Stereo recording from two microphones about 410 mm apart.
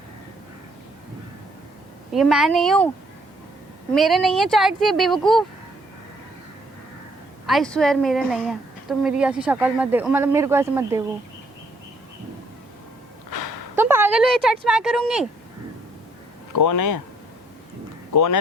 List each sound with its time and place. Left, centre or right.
2.1 s a woman's voice: centre
3.9 s a woman's voice: centre
7.4 s a woman's voice: centre
13.7 s speech: centre
16.6 s speech: left
18.1 s speech: left